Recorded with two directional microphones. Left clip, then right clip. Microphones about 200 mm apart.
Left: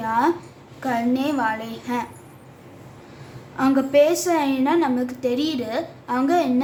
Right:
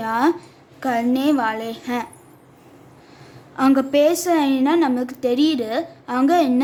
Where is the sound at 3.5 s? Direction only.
40° right (ahead or behind).